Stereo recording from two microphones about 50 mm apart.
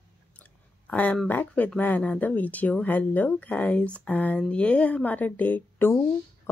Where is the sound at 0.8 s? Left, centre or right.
Left.